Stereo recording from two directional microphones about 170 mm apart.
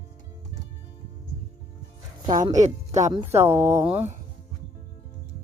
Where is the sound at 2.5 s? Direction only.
40° right (ahead or behind).